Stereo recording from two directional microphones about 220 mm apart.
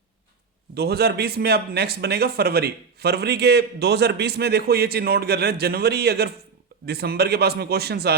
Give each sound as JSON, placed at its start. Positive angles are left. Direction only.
{"t": 0.7, "sound": "speech", "side_deg": -45}